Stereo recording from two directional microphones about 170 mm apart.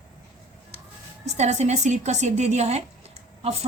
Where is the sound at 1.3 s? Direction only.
40° right (ahead or behind).